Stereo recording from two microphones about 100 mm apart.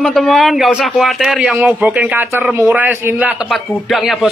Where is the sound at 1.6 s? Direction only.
15° right (ahead or behind).